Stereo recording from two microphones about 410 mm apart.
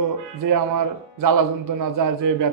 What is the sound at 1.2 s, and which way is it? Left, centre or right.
A man's voice, right.